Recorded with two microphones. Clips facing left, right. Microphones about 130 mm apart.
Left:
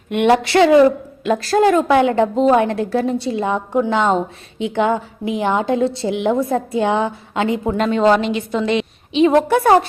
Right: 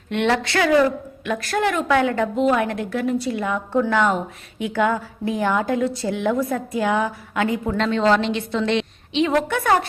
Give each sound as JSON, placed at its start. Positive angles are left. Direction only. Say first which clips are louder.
{"t": 0.1, "sound": "a woman's voice", "louder": "left 6 dB", "side_deg": 15}
{"t": 7.8, "sound": "a woman's voice", "louder": "left 4 dB", "side_deg": 10}
{"t": 9.1, "sound": "a woman's voice", "louder": "left 7 dB", "side_deg": 25}